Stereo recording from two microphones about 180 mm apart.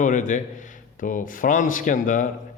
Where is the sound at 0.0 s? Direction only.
45° left (ahead or behind).